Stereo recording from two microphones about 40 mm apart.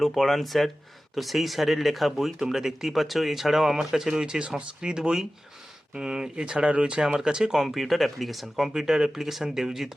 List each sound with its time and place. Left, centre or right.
0.0 s speech: centre; by 7.0 s right
7.0 s speech: centre
8.5 s speech: centre